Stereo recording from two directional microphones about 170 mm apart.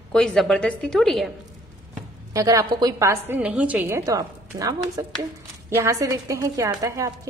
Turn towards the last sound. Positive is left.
turn(degrees=-20)  # may be behind; listen again after turning